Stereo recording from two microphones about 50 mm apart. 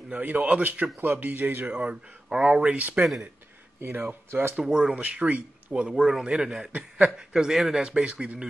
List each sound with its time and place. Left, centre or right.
0.1 s a man's voice: right
1.8 s speech: right
3.0 s speech: centre
3.9 s speech: right
4.6 s a man's voice: centre
5.0 s speech: right
5.7 s a man's voice: centre
7.8 s speech: centre